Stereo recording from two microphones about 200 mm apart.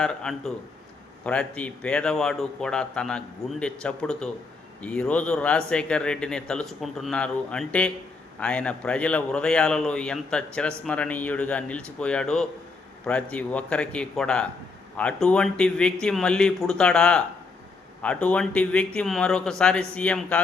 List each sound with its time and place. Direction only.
0.0 s a man's voice: 5° left (ahead or behind)